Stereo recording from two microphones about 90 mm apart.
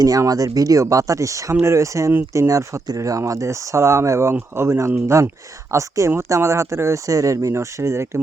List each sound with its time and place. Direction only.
0.0 s speech: 45° right (ahead or behind)